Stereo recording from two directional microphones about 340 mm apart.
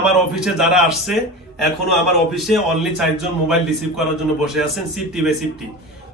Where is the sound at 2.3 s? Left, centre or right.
Centre.